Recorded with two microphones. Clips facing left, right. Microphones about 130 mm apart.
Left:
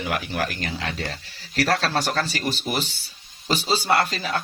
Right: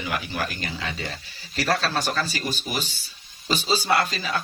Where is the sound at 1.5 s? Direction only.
90° left.